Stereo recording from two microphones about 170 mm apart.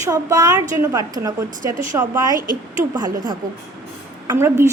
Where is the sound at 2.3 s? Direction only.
55° right (ahead or behind).